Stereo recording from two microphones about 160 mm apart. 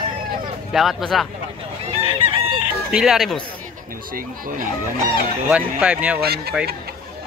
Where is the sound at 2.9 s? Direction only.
5° right (ahead or behind).